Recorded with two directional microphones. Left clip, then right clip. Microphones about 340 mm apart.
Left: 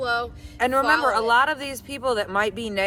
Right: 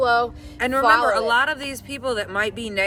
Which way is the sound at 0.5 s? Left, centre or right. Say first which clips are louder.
Left 1 dB; centre.